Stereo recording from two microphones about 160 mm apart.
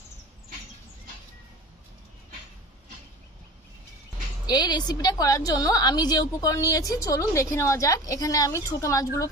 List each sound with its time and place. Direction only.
4.5 s a woman's voice: 25° left (ahead or behind)